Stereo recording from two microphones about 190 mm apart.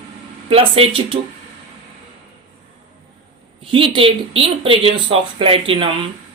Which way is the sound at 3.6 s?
25° right (ahead or behind).